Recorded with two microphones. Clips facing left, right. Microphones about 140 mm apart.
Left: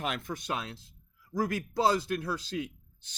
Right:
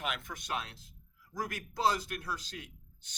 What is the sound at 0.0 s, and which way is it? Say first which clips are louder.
A man's voice: left 5 dB; 35° left (ahead or behind).